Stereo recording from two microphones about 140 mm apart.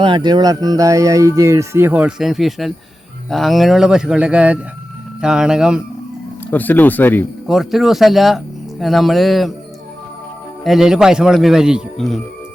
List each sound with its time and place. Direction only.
0.0 s speech: 35° right (ahead or behind); by 5.8 s 5° right (ahead or behind)
6.5 s speech: 15° left (ahead or behind)
7.4 s speech: centre (ahead or behind)
10.6 s speech: centre (ahead or behind)